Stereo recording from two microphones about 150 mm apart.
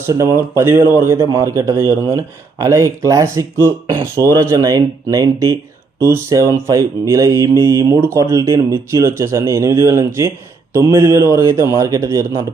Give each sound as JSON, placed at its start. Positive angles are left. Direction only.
{"t": 0.0, "sound": "speech", "side_deg": -20}